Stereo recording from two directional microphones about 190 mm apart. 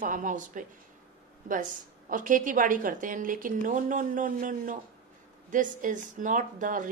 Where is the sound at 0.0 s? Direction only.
45° right (ahead or behind).